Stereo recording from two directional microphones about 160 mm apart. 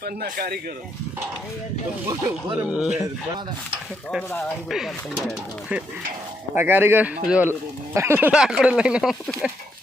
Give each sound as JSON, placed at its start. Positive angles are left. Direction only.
{"t": 0.0, "sound": "speech", "side_deg": -75}
{"t": 2.6, "sound": "speech", "side_deg": -5}
{"t": 4.1, "sound": "speech", "side_deg": 0}
{"t": 6.5, "sound": "speech", "side_deg": -10}